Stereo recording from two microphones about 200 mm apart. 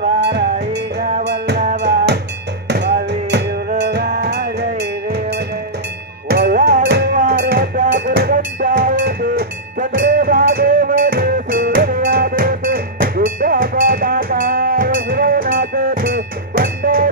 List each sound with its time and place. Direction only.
0.2 s music: 55° right (ahead or behind)
8.5 s music: 45° right (ahead or behind)